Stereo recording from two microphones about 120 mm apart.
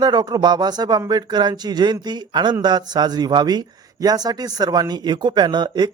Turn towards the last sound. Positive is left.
turn(degrees=-35)  # may be behind; listen again after turning